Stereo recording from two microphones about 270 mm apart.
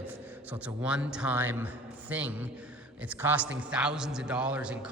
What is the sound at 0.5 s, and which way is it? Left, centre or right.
A man's voice, centre.